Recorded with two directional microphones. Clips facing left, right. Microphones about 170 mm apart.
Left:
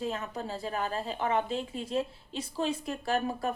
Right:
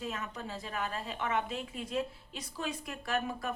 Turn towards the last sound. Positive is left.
turn(degrees=30)  # may be behind; listen again after turning